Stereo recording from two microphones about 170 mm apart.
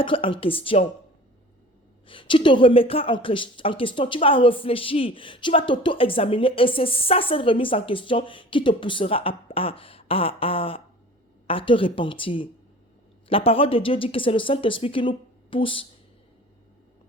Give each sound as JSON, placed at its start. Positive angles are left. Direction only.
{"t": 0.0, "sound": "speech", "side_deg": 30}
{"t": 2.0, "sound": "speech", "side_deg": 30}